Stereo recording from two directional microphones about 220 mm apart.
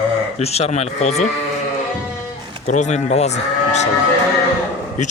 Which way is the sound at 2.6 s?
30° left (ahead or behind).